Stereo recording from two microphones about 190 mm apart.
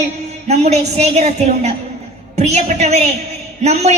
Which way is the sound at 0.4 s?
35° right (ahead or behind).